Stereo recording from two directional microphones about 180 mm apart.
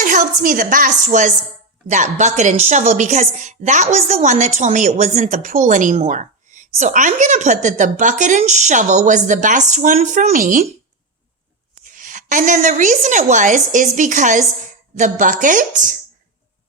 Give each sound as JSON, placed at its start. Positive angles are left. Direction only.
{"t": 0.0, "sound": "a woman's voice", "side_deg": -45}
{"t": 11.9, "sound": "a woman's voice", "side_deg": -45}